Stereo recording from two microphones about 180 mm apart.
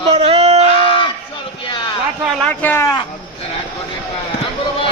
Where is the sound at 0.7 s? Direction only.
30° left (ahead or behind).